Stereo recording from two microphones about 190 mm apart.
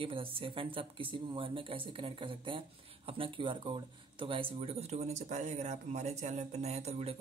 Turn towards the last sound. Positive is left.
turn(degrees=-35)  # may be behind; listen again after turning